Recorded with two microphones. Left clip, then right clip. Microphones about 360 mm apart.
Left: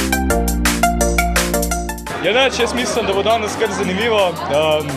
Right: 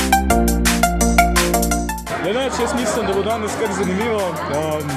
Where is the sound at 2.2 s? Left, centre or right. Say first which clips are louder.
Left 7 dB; left.